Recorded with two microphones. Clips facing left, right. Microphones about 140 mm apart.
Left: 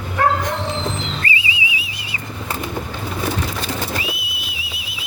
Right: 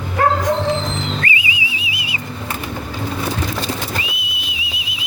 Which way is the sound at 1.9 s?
10° right (ahead or behind).